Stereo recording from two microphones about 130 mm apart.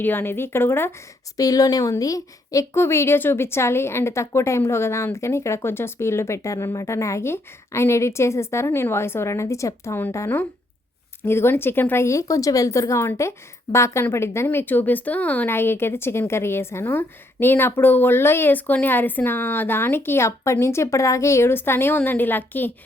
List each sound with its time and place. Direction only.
0.0 s a woman's voice: 15° left (ahead or behind)